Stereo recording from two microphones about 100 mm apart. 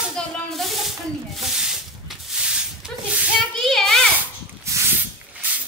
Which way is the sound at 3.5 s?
5° left (ahead or behind).